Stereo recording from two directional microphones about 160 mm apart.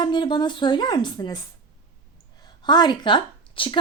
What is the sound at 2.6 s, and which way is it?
Speech, 25° left (ahead or behind).